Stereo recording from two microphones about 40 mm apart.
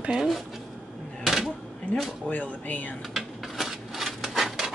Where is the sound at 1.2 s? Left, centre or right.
Centre.